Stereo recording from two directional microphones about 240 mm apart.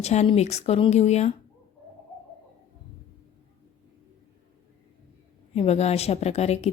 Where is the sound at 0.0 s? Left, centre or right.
Left.